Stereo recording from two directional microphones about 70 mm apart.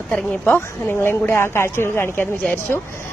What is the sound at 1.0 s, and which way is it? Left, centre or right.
Speech, left.